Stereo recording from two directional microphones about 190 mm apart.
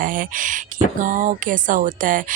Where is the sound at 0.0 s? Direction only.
45° right (ahead or behind).